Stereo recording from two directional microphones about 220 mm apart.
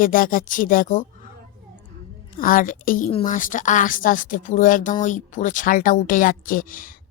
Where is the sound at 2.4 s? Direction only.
40° left (ahead or behind).